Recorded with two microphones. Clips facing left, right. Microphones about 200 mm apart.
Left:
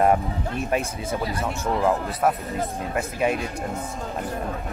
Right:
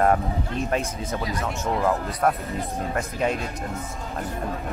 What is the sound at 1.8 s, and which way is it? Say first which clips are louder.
Speech: left 1 dB; 15° left (ahead or behind).